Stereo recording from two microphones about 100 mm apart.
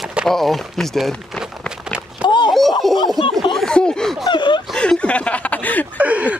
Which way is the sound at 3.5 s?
5° left (ahead or behind).